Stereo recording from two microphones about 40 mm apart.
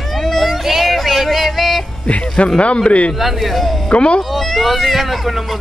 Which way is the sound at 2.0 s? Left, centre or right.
Left.